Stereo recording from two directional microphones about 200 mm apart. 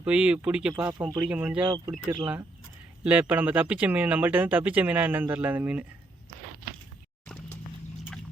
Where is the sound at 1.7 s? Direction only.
20° right (ahead or behind).